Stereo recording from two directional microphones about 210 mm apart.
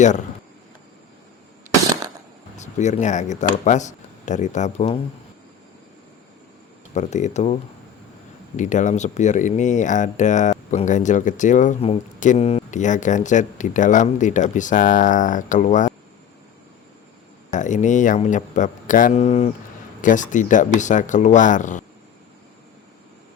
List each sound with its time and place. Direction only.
2.6 s speech: 35° left (ahead or behind)
6.9 s speech: 35° left (ahead or behind)
17.5 s speech: 35° left (ahead or behind)